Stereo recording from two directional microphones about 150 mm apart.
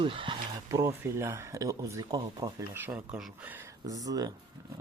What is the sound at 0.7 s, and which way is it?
Speech, 20° right (ahead or behind).